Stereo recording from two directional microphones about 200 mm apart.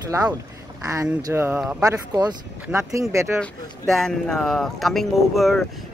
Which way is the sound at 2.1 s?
20° right (ahead or behind).